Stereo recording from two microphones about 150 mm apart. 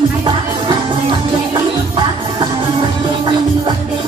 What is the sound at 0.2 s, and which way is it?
Music, 30° right (ahead or behind).